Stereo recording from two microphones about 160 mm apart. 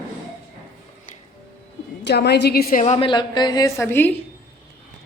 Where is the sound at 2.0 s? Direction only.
90° left.